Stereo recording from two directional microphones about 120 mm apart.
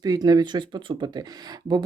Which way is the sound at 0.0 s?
30° right (ahead or behind).